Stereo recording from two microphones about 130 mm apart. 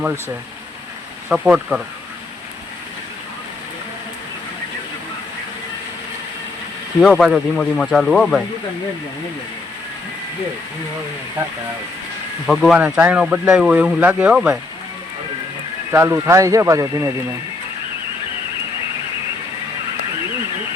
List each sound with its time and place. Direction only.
1.3 s speech: 5° right (ahead or behind)
7.0 s speech: centre (ahead or behind)
12.5 s speech: centre (ahead or behind)
12.8 s speech: 10° right (ahead or behind)
15.9 s speech: 20° right (ahead or behind)